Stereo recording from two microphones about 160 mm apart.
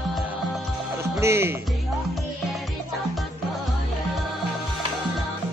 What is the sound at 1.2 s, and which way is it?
Music, 15° right (ahead or behind).